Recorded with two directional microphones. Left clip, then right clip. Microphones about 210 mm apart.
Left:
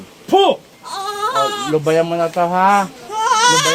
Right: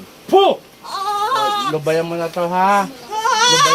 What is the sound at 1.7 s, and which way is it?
Speech, 45° left (ahead or behind).